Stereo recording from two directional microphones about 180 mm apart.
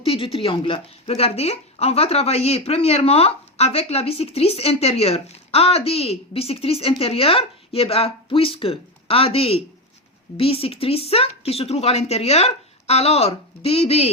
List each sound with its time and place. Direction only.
0.0 s speech: 30° left (ahead or behind)